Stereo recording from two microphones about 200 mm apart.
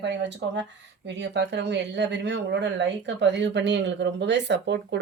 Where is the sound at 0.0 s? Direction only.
60° right (ahead or behind).